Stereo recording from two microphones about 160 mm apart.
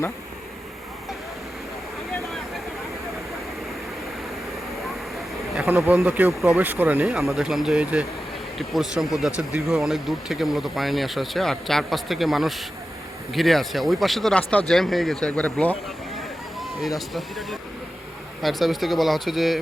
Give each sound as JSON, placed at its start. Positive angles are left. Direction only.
{"t": 5.5, "sound": "speech", "side_deg": -15}
{"t": 17.2, "sound": "speech", "side_deg": 0}